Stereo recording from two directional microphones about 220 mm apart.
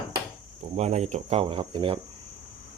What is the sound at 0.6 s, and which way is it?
Speech, 30° right (ahead or behind).